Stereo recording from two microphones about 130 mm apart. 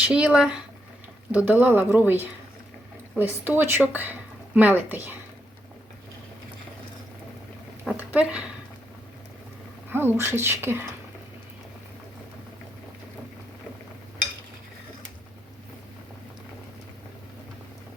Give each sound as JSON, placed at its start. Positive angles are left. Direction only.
{"t": 0.0, "sound": "speech", "side_deg": -10}
{"t": 7.9, "sound": "speech", "side_deg": -10}
{"t": 9.9, "sound": "speech", "side_deg": -15}